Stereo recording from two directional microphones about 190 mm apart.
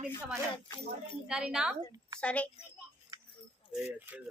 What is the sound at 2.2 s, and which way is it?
Speech, 5° left (ahead or behind).